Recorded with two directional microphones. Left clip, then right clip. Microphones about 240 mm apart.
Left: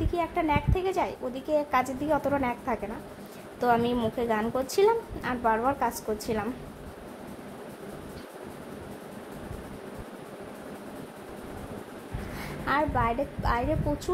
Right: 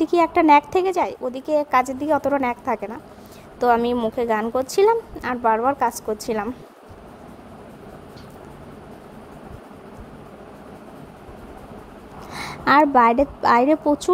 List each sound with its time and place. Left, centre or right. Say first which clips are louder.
0.0 s a woman's voice: right 11 dB; right
12.4 s a woman's voice: right 12 dB; right